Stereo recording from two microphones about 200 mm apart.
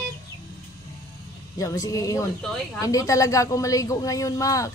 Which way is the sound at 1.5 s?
15° left (ahead or behind).